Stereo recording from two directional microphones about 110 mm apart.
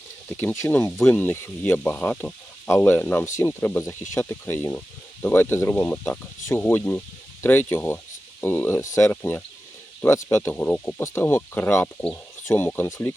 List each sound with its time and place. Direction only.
0.3 s speech: 25° left (ahead or behind)